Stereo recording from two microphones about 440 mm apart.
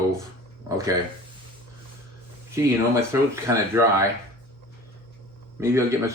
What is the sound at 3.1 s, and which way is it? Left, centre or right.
Speech, centre.